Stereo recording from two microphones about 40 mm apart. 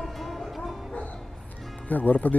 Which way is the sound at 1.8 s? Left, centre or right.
Left.